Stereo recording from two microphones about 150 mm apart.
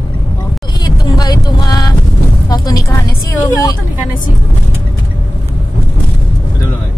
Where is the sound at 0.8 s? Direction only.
25° left (ahead or behind).